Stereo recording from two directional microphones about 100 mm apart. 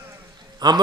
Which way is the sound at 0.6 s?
45° right (ahead or behind).